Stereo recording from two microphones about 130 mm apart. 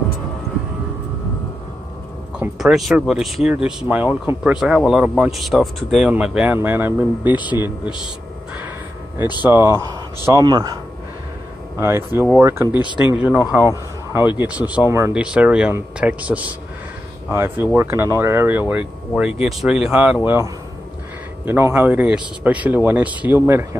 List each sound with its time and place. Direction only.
2.3 s speech: 5° right (ahead or behind)
9.4 s speech: 15° right (ahead or behind)
11.8 s speech: 20° right (ahead or behind)
14.9 s speech: 20° right (ahead or behind)
15.1 s speech: 10° right (ahead or behind)